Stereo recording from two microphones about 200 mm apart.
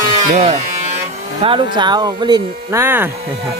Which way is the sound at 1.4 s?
25° right (ahead or behind).